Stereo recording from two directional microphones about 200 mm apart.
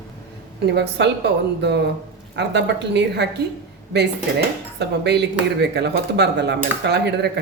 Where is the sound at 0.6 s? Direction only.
55° right (ahead or behind).